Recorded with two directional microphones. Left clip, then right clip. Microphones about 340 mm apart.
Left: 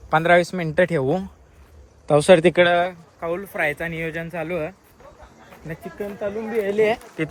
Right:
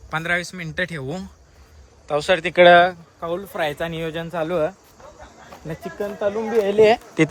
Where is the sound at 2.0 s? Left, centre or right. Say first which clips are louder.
Left 6 dB; centre.